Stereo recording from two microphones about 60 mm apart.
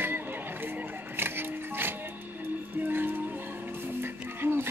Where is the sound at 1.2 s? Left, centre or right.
Right.